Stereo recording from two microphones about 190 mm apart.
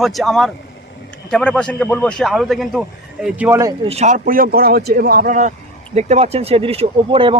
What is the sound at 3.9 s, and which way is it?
A man's voice, 40° right (ahead or behind).